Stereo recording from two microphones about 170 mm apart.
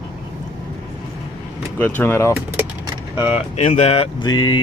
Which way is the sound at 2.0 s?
15° left (ahead or behind).